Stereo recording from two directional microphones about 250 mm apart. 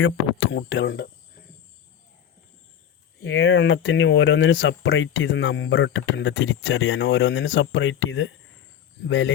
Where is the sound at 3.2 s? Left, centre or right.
Left.